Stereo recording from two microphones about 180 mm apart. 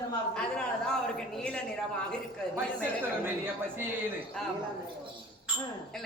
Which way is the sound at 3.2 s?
10° right (ahead or behind).